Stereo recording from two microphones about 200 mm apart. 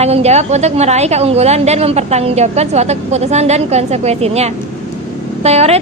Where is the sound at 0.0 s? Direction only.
30° right (ahead or behind).